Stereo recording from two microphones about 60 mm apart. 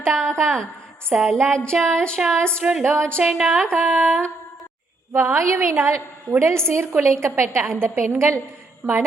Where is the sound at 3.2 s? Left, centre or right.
Centre.